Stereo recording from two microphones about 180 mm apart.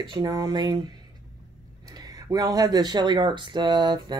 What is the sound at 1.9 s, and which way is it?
Speech, 20° right (ahead or behind).